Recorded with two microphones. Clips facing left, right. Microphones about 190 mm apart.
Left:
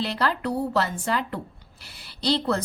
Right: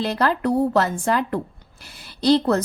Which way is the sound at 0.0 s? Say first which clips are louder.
Right 5 dB; 45° right (ahead or behind).